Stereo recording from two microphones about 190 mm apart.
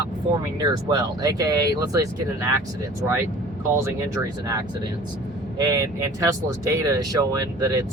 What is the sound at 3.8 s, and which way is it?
Speech, 15° right (ahead or behind).